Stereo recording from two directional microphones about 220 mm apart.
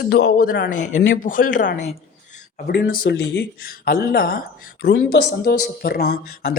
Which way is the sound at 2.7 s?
40° left (ahead or behind).